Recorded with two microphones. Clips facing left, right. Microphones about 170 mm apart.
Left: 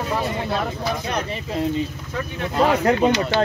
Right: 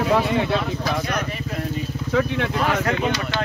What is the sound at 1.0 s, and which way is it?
Speech, 25° left (ahead or behind).